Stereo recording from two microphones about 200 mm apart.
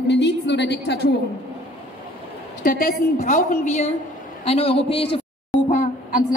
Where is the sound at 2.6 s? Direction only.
45° left (ahead or behind).